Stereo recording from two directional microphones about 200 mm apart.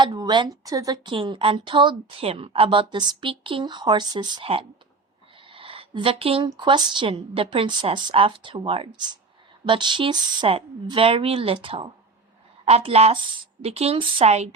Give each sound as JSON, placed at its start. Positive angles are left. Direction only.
{"t": 0.0, "sound": "a woman's voice", "side_deg": -20}